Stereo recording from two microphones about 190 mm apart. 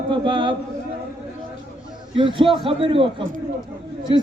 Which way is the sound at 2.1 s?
25° right (ahead or behind).